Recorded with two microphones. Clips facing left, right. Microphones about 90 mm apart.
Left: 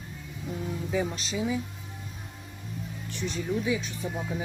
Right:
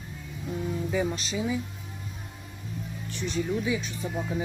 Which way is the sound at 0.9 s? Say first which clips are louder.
Left 1 dB; centre (ahead or behind).